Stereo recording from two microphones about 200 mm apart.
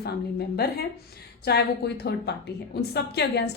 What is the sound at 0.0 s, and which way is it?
A woman's voice, 50° left (ahead or behind).